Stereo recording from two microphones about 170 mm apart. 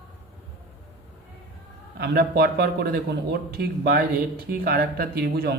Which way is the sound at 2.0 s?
70° right (ahead or behind).